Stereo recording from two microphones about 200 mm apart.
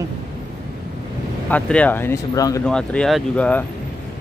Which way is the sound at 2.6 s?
5° left (ahead or behind).